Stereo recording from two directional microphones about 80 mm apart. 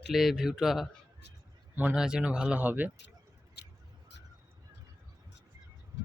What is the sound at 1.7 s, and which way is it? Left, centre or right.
Speech, centre.